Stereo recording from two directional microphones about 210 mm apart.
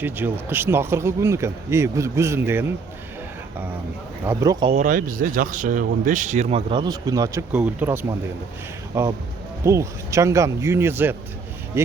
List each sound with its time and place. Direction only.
0.0 s speech: 10° right (ahead or behind)
4.3 s speech: 15° right (ahead or behind)
4.7 s speech: 40° right (ahead or behind); by 11.2 s 10° right (ahead or behind)